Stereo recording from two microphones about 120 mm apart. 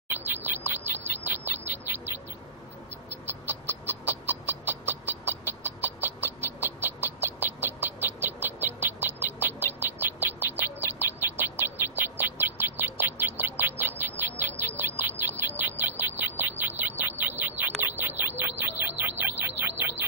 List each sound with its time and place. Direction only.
0.1 s bird: 15° right (ahead or behind)
3.3 s a sound: 15° right (ahead or behind)
14.4 s bird: 20° right (ahead or behind)